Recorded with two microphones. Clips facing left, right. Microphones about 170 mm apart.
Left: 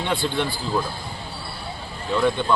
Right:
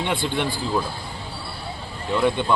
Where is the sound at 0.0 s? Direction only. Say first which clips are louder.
Even; 15° right (ahead or behind).